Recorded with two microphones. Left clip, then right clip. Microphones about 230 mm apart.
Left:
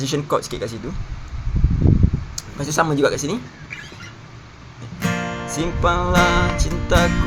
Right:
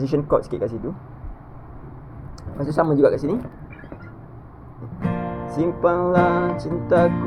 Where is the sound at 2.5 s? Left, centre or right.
Left.